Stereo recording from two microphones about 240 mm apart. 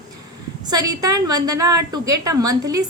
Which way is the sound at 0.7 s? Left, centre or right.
Centre.